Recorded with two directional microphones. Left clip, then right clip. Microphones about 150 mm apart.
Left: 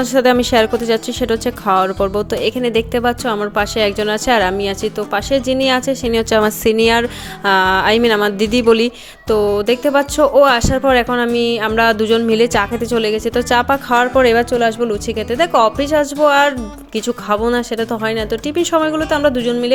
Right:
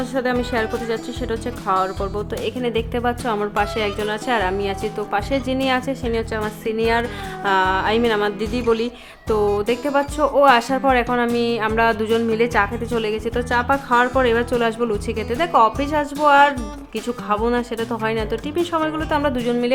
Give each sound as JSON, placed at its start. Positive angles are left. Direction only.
{"t": 0.0, "sound": "speech", "side_deg": 40}
{"t": 6.1, "sound": "speech", "side_deg": 45}
{"t": 9.2, "sound": "music", "side_deg": 25}
{"t": 9.6, "sound": "speech", "side_deg": 25}